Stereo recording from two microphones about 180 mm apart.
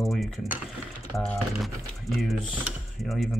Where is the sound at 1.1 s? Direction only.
5° left (ahead or behind).